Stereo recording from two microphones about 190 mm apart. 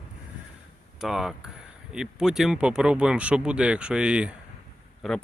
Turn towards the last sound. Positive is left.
turn(degrees=0)  # may be behind; listen again after turning